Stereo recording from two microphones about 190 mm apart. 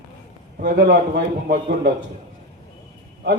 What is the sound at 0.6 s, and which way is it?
Speech, 45° right (ahead or behind).